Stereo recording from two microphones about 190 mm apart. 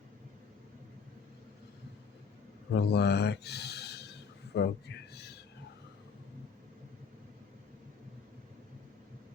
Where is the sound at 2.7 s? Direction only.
60° left (ahead or behind).